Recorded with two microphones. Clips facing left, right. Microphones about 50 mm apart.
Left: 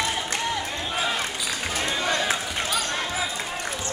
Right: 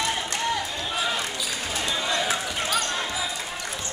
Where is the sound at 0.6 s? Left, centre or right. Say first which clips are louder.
Left 1 dB; left.